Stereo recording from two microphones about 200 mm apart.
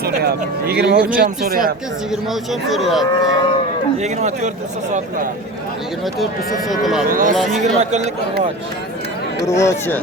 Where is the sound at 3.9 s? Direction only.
35° right (ahead or behind).